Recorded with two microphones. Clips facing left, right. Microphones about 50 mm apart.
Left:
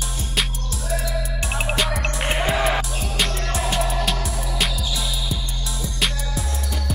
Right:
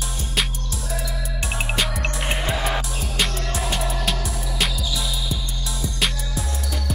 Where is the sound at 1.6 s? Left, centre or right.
Centre.